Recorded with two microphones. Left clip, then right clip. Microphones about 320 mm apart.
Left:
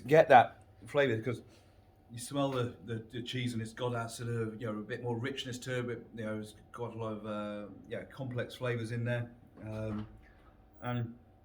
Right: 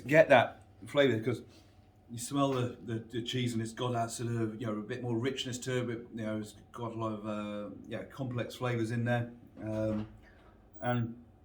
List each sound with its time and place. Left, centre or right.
0.0 s a man's voice: left; by 9.2 s centre
10.8 s speech: centre